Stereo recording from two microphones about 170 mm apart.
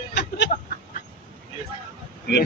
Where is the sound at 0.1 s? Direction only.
90° left.